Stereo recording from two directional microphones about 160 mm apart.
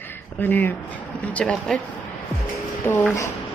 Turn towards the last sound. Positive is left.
turn(degrees=15)  # may be behind; listen again after turning